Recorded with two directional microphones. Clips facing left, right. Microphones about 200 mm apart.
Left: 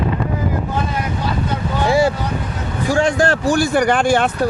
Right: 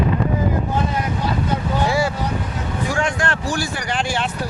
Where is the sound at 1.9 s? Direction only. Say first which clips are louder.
Left 8 dB; 25° left (ahead or behind).